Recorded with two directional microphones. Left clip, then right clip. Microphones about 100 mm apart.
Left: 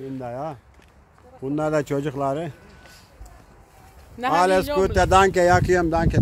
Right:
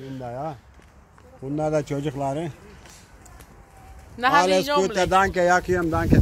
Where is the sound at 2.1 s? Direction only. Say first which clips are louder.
Left 2 dB; 25° left (ahead or behind).